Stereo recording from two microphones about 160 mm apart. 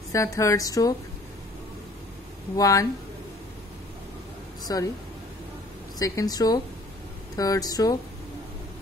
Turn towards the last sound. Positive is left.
turn(degrees=25)  # may be behind; listen again after turning